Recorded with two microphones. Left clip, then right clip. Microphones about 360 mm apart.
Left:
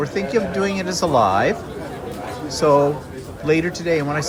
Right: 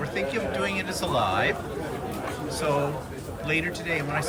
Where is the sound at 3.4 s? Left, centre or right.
Centre.